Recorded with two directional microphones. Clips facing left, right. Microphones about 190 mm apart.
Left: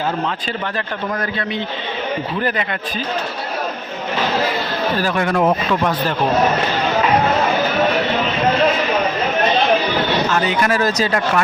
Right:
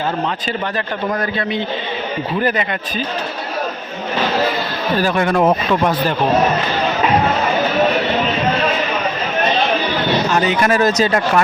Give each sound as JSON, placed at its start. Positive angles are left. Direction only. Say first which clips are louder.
{"t": 5.0, "sound": "speech", "louder": "right 3 dB", "side_deg": -25}
{"t": 10.3, "sound": "speech", "louder": "right 2 dB", "side_deg": -20}